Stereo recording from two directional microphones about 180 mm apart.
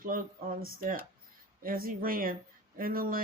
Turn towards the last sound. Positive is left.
turn(degrees=-55)  # may be behind; listen again after turning